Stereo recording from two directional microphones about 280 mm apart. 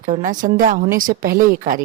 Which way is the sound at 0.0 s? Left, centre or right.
Right.